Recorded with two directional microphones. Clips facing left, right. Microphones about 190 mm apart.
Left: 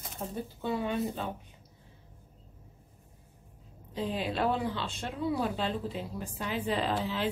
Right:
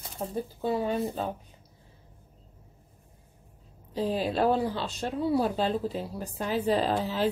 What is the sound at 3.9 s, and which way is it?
Speech, 35° right (ahead or behind).